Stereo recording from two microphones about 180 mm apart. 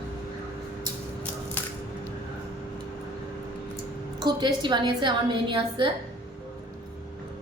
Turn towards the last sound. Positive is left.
turn(degrees=-25)  # may be behind; listen again after turning